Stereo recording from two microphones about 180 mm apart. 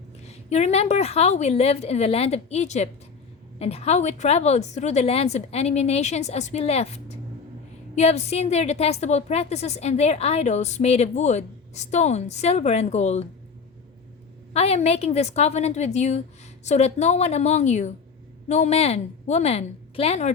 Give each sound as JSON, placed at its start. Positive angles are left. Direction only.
{"t": 0.3, "sound": "a woman's voice", "side_deg": 35}
{"t": 14.5, "sound": "a woman's voice", "side_deg": 35}